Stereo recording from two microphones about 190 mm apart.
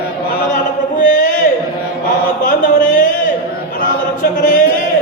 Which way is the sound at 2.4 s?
45° left (ahead or behind).